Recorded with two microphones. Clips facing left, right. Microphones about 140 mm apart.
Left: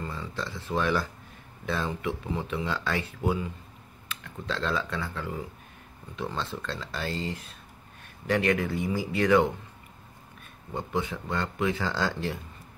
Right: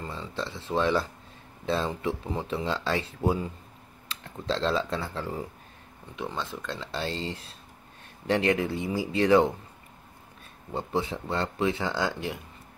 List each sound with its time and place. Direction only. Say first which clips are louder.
0.0 s a sound: right 1 dB; 25° right (ahead or behind)
1.7 s speech: right 2 dB; 30° right (ahead or behind)
6.1 s speech: left 1 dB; 15° right (ahead or behind)
10.7 s speech: right 1 dB; 30° right (ahead or behind)